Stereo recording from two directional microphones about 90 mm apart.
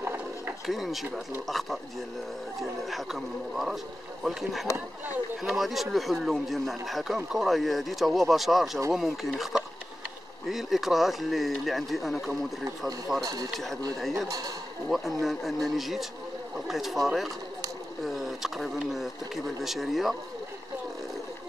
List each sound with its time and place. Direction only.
0.0 s a sound: 25° right (ahead or behind)
0.7 s speech: centre (ahead or behind)
2.9 s speech: 5° right (ahead or behind)
13.2 s speech: 45° right (ahead or behind)
13.5 s speech: centre (ahead or behind)
14.1 s a man's voice: 40° right (ahead or behind)
14.9 s speech: centre (ahead or behind)